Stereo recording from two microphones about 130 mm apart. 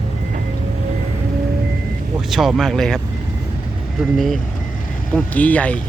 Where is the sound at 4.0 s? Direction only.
Centre (ahead or behind).